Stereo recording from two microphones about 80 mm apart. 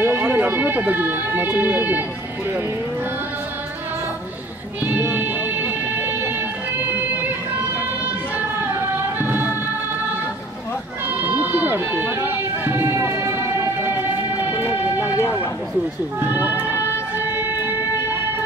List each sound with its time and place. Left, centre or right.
0.0 s speech: right
4.8 s music: right
9.2 s music: right
11.1 s music: right